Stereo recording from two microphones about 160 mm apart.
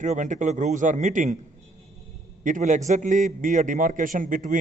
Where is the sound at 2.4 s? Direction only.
50° right (ahead or behind).